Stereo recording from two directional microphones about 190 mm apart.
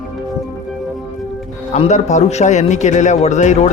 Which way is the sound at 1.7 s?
40° left (ahead or behind).